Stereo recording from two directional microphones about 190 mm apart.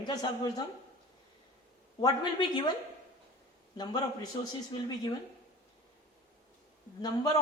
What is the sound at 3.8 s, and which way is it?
Speech, 20° left (ahead or behind).